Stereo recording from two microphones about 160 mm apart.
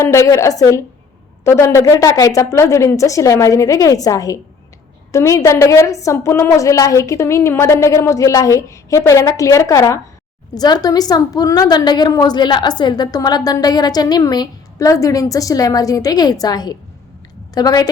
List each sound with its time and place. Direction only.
0.0 s a woman's voice: 20° left (ahead or behind)